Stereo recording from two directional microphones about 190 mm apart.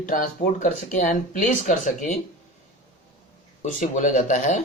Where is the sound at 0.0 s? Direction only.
40° left (ahead or behind).